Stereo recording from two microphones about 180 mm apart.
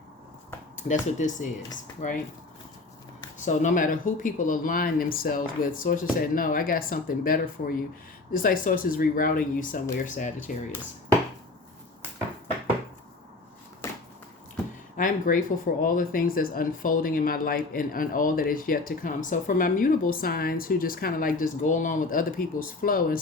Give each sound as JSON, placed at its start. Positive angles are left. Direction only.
{"t": 0.9, "sound": "speech", "side_deg": 45}
{"t": 3.4, "sound": "speech", "side_deg": 45}
{"t": 14.9, "sound": "speech", "side_deg": 50}